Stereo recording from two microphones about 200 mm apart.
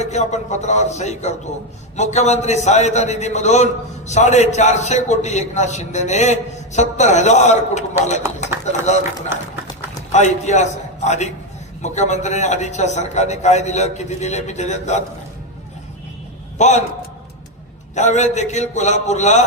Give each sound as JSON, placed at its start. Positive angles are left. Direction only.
{"t": 0.0, "sound": "a man's voice", "side_deg": 35}
{"t": 10.1, "sound": "a man's voice", "side_deg": 35}
{"t": 16.6, "sound": "a man's voice", "side_deg": 35}
{"t": 17.9, "sound": "a man's voice", "side_deg": 35}